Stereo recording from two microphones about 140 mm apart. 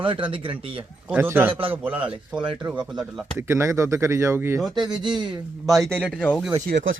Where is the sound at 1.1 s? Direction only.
15° right (ahead or behind).